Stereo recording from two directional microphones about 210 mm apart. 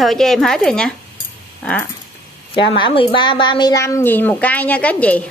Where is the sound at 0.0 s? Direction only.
Centre (ahead or behind).